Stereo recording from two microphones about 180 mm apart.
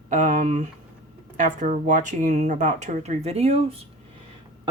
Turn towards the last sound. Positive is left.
turn(degrees=-35)  # may be behind; listen again after turning